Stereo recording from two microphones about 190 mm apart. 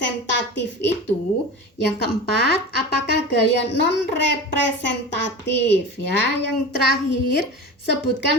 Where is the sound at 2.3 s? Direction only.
60° left (ahead or behind).